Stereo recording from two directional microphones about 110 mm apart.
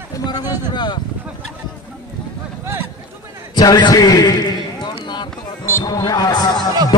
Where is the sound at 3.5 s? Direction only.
40° left (ahead or behind).